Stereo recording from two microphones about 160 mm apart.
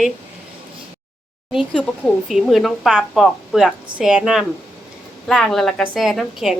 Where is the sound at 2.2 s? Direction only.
Centre (ahead or behind).